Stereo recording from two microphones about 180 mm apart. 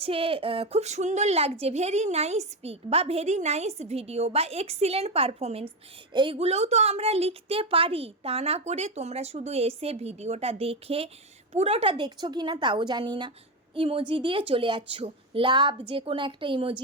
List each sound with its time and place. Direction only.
0.0 s a woman's voice: 30° right (ahead or behind)